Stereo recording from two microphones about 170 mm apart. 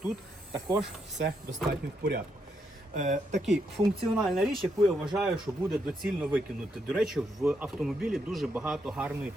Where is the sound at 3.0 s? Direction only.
45° right (ahead or behind).